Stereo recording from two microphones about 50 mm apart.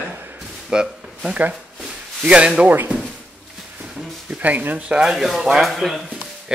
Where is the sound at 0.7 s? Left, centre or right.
Centre.